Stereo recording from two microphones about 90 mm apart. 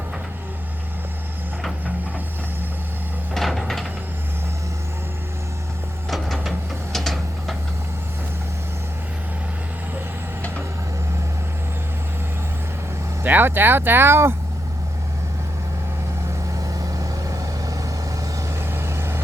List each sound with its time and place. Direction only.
3.3 s a sound: centre (ahead or behind)
6.1 s vehicle: centre (ahead or behind)
6.9 s mechanisms: 5° left (ahead or behind)
13.2 s speech: 20° right (ahead or behind)
16.6 s vehicle: 40° right (ahead or behind)
18.3 s vehicle: 30° right (ahead or behind)